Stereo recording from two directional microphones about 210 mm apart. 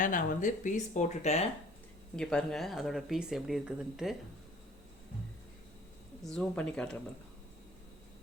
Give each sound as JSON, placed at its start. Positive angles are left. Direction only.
{"t": 0.0, "sound": "speech", "side_deg": 40}
{"t": 2.1, "sound": "speech", "side_deg": 5}
{"t": 6.2, "sound": "speech", "side_deg": 5}